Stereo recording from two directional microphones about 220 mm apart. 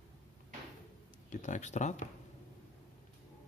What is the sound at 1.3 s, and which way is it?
Speech, 35° left (ahead or behind).